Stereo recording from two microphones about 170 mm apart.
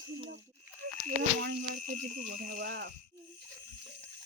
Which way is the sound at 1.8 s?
55° right (ahead or behind).